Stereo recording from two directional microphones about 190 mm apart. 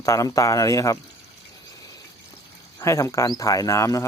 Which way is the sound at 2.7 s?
15° left (ahead or behind).